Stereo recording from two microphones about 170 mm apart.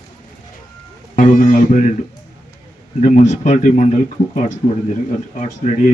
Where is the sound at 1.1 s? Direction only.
50° left (ahead or behind).